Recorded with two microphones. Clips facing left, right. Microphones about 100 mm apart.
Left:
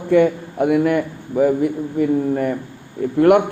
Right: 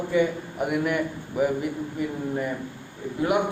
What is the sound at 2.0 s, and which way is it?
A man's voice, 55° left (ahead or behind).